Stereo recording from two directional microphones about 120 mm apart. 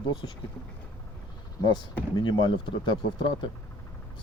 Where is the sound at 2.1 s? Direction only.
40° left (ahead or behind).